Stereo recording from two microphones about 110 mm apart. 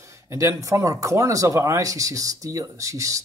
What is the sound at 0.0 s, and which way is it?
Speech, 25° right (ahead or behind).